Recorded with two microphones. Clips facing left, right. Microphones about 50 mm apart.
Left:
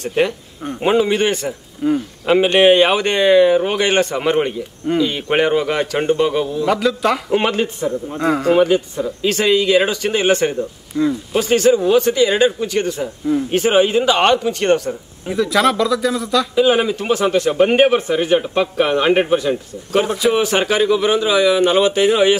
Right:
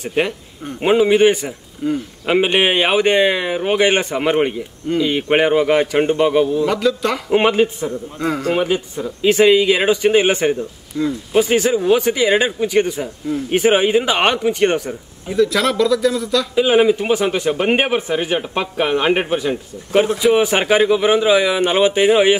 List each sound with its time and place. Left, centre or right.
0.0 s a man's voice: centre
1.8 s speech: centre
2.2 s a man's voice: centre
6.7 s a man's voice: centre
7.2 s a man's voice: centre
10.9 s speech: centre
11.3 s a man's voice: centre
15.2 s a man's voice: centre
16.5 s a man's voice: centre